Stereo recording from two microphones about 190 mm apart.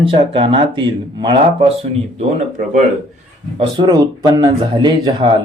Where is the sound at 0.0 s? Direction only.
30° right (ahead or behind).